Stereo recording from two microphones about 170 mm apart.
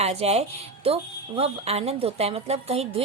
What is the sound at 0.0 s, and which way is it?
Speech, 35° right (ahead or behind).